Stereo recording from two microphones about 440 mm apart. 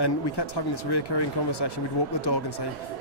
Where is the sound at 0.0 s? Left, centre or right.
Left.